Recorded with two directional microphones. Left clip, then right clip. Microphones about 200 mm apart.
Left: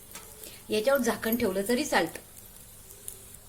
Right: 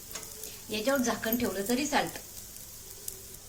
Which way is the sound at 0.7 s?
50° left (ahead or behind).